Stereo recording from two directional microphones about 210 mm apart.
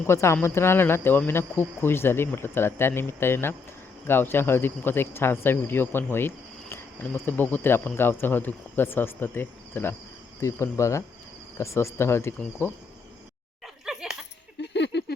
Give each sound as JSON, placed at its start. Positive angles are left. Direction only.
{"t": 0.1, "sound": "speech", "side_deg": 10}
{"t": 13.8, "sound": "laughter", "side_deg": 0}
{"t": 14.6, "sound": "a sound", "side_deg": 55}